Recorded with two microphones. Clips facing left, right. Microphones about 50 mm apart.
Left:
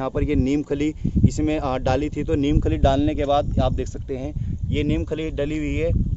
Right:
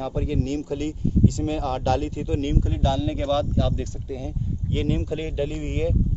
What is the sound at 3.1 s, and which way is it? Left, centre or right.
Speech, left.